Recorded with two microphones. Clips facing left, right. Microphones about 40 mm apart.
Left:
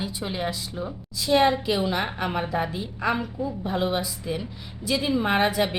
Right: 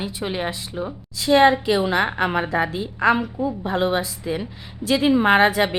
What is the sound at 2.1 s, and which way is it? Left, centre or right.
Speech, right.